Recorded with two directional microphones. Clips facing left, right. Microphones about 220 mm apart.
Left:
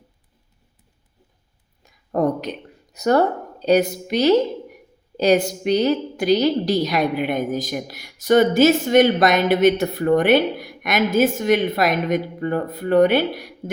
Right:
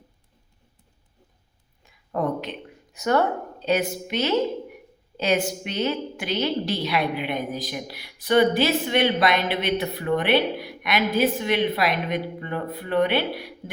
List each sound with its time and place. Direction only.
1.8 s speech: 40° left (ahead or behind)